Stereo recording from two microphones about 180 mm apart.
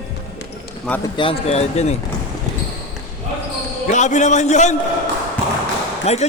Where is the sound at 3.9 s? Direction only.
40° left (ahead or behind).